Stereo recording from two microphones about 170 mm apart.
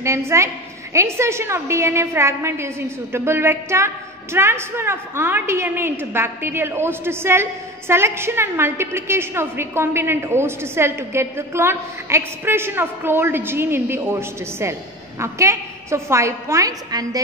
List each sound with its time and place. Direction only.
0.0 s a woman's voice: 15° right (ahead or behind)